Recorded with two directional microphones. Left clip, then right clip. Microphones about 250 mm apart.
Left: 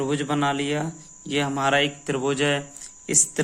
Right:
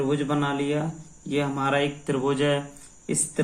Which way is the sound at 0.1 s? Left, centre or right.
Left.